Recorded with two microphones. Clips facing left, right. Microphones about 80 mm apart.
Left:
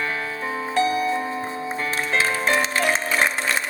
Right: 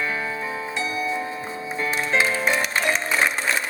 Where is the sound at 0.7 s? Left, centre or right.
Left.